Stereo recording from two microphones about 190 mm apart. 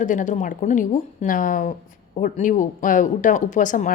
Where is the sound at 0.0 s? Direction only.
40° left (ahead or behind).